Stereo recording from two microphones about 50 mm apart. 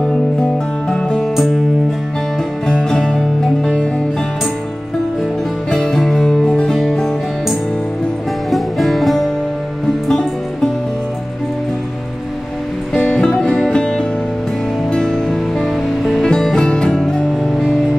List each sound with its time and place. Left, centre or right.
0.8 s music: centre
2.7 s music: centre
5.7 s music: centre
8.5 s music: centre
13.2 s music: centre
16.3 s music: centre